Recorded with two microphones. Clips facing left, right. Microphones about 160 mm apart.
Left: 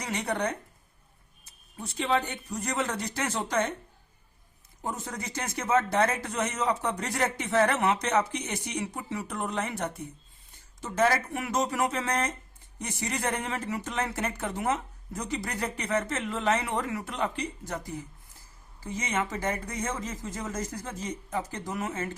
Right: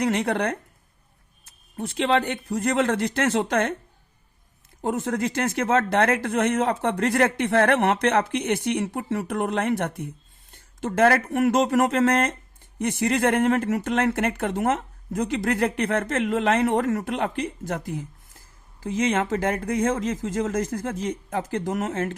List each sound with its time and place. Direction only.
0.0 s speech: 65° right (ahead or behind)
4.8 s speech: 65° right (ahead or behind)
18.9 s speech: 90° right
19.3 s speech: 55° right (ahead or behind)